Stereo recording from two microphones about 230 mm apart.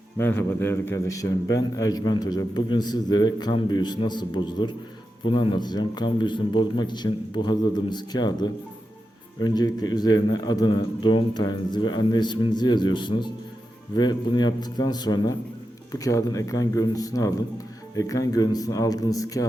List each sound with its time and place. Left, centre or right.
0.2 s a man's voice: centre